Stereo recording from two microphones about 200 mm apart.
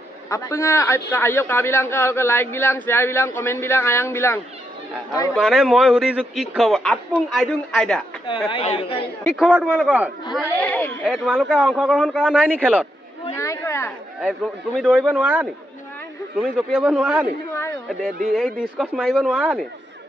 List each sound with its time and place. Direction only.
0.3 s a man's voice: 15° left (ahead or behind)
5.3 s a man's voice: centre (ahead or behind)
8.3 s a woman's voice: 25° left (ahead or behind)
9.2 s a man's voice: centre (ahead or behind)
10.3 s a man's voice: 5° left (ahead or behind)
13.4 s chatter: 15° left (ahead or behind)
14.2 s speech: 5° right (ahead or behind)
16.5 s a man's voice: 5° right (ahead or behind)
18.3 s a man's voice: centre (ahead or behind)